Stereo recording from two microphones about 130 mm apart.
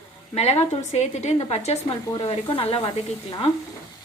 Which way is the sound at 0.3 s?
55° left (ahead or behind).